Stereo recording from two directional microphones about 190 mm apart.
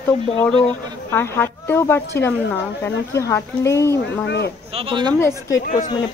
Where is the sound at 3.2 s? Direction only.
15° left (ahead or behind).